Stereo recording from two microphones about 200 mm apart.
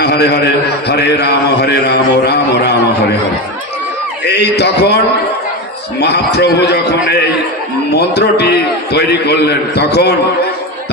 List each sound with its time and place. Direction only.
0.0 s a man's voice: 55° left (ahead or behind)
4.3 s a man's voice: 55° left (ahead or behind)
6.0 s a man's voice: 55° left (ahead or behind)